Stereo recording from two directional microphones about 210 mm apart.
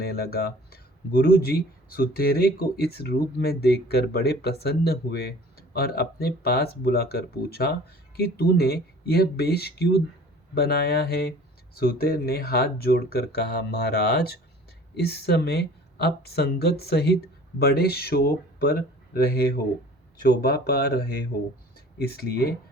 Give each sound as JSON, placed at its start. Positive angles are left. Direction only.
{"t": 0.0, "sound": "speech", "side_deg": 45}